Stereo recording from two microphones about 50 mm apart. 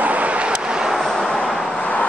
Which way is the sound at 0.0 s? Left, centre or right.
Right.